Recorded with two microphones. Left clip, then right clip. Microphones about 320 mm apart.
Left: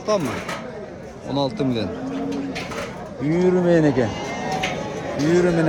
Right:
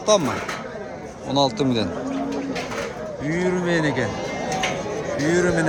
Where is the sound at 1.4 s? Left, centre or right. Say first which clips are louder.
Right 3 dB; centre.